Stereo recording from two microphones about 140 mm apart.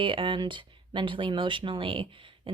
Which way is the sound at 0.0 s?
35° right (ahead or behind).